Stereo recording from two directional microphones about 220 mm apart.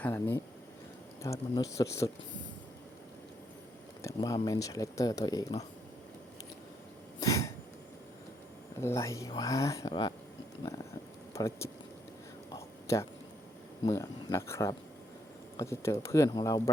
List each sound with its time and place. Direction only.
0.0 s speech: 10° left (ahead or behind)
4.0 s speech: 15° left (ahead or behind)
7.2 s cough: 15° left (ahead or behind)
8.8 s speech: 15° left (ahead or behind)
11.3 s speech: 15° left (ahead or behind)
12.5 s a sound: 15° left (ahead or behind)
13.8 s speech: 15° left (ahead or behind)